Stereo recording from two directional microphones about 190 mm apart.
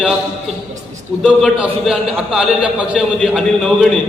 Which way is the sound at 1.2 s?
5° right (ahead or behind).